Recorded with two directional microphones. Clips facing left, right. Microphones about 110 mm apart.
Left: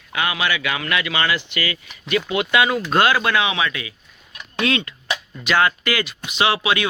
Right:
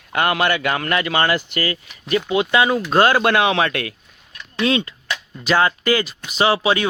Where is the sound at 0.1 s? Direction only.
50° right (ahead or behind).